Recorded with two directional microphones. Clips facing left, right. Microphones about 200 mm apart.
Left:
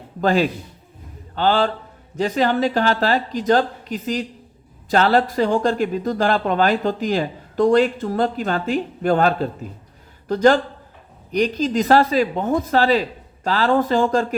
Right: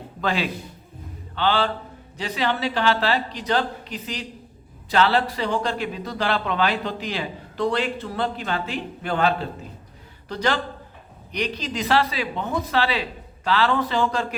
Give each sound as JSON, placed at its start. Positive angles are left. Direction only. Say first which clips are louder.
{"t": 0.2, "sound": "speech", "louder": "left 7 dB", "side_deg": 45}